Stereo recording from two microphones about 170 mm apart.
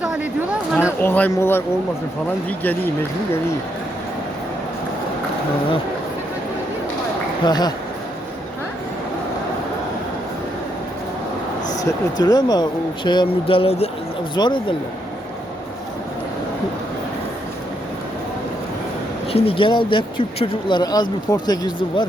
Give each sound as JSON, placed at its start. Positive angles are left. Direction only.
{"t": 0.0, "sound": "a sound", "side_deg": -5}
{"t": 0.8, "sound": "speech", "side_deg": 10}
{"t": 7.4, "sound": "speech", "side_deg": 25}
{"t": 11.8, "sound": "speech", "side_deg": 20}
{"t": 14.3, "sound": "speech", "side_deg": 25}
{"t": 19.3, "sound": "speech", "side_deg": 35}